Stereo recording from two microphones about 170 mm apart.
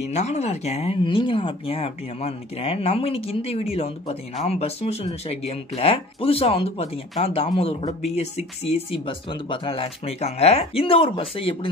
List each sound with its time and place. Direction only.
0.1 s speech: 40° left (ahead or behind)